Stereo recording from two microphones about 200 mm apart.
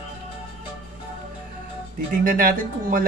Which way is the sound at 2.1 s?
45° right (ahead or behind).